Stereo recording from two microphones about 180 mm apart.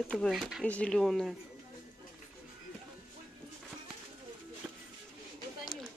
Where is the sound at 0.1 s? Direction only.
5° left (ahead or behind).